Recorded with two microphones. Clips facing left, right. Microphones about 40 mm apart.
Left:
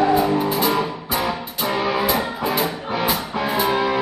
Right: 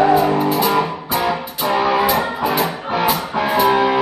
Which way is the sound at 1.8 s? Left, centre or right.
Centre.